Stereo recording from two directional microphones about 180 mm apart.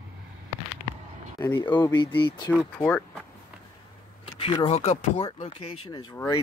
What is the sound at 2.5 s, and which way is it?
Speech, 5° left (ahead or behind).